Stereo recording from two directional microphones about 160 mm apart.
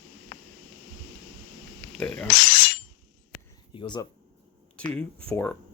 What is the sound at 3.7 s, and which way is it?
Speech, 30° left (ahead or behind).